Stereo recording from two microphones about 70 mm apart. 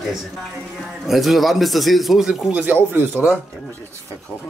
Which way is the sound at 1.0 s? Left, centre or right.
Centre.